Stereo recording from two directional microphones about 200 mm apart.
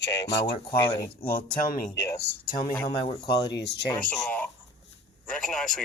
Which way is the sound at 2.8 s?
25° left (ahead or behind).